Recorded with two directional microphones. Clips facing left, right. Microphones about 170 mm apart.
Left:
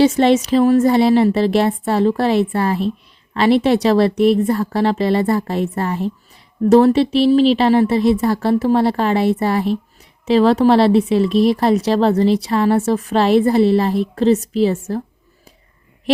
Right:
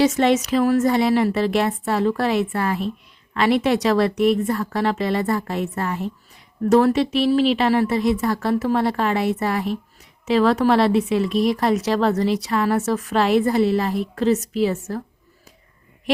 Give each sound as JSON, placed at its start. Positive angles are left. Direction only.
{"t": 0.0, "sound": "speech", "side_deg": 30}